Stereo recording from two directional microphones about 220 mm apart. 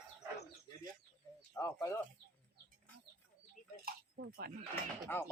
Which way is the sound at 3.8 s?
45° right (ahead or behind).